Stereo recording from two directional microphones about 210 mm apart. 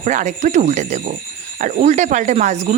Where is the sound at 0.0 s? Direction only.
35° right (ahead or behind).